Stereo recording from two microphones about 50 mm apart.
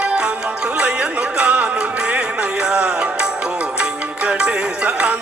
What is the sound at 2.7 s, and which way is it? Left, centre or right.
Music, right.